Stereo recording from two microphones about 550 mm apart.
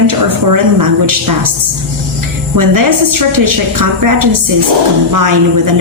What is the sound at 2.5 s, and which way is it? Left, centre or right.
A woman's voice, right.